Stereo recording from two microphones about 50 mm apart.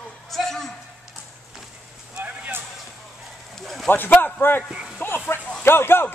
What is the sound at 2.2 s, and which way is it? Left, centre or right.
Vehicle, right.